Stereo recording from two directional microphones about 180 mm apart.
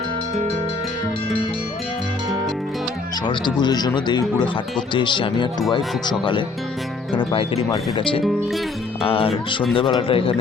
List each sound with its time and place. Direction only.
3.2 s speech: 25° left (ahead or behind)